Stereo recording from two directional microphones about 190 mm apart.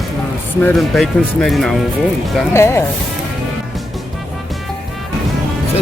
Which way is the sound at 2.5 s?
15° left (ahead or behind).